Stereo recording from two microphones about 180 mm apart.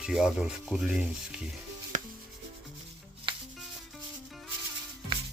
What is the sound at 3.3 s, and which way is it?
Music, 25° right (ahead or behind).